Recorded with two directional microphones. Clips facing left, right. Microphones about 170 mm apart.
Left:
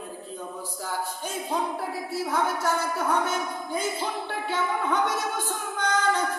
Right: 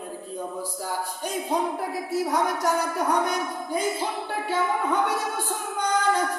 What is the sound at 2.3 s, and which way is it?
Speech, 15° right (ahead or behind).